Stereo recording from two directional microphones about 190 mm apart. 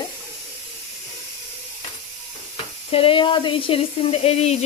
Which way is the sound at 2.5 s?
30° left (ahead or behind).